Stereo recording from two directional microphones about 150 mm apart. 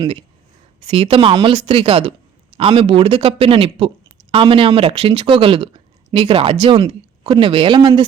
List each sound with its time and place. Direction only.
0.9 s speech: 40° right (ahead or behind)